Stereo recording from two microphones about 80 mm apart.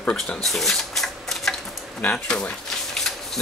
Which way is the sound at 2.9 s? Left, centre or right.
Centre.